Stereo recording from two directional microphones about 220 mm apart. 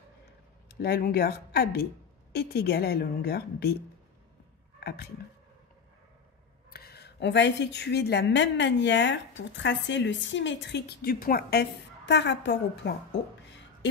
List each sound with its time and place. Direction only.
0.7 s a woman's voice: 45° left (ahead or behind)
4.7 s a sound: 45° left (ahead or behind)
6.7 s a woman's voice: 45° left (ahead or behind)